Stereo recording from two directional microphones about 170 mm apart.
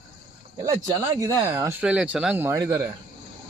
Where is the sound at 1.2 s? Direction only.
15° right (ahead or behind).